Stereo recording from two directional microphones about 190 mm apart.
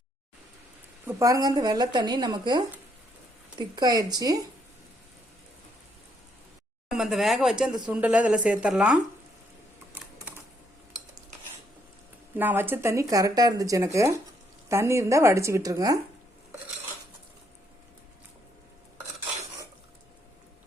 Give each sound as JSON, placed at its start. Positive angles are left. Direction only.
{"t": 1.0, "sound": "speech", "side_deg": -15}
{"t": 6.9, "sound": "speech", "side_deg": 0}
{"t": 12.4, "sound": "speech", "side_deg": -10}